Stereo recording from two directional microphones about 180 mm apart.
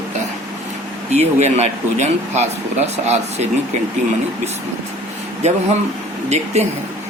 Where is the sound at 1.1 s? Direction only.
35° right (ahead or behind).